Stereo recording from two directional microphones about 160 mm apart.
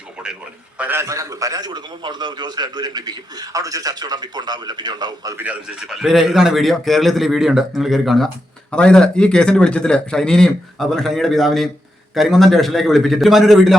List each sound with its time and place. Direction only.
0.8 s a man's voice: 15° right (ahead or behind)
5.5 s a man's voice: 5° right (ahead or behind)